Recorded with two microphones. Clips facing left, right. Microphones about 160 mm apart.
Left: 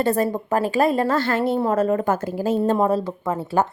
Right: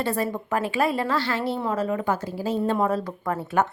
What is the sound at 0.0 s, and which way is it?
A woman's voice, 45° left (ahead or behind).